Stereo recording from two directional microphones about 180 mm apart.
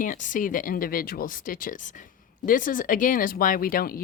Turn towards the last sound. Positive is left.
turn(degrees=55)  # may be behind; listen again after turning